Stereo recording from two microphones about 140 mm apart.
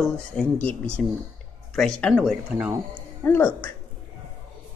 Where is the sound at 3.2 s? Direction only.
15° left (ahead or behind).